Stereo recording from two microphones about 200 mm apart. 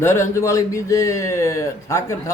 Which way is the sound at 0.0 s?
10° left (ahead or behind).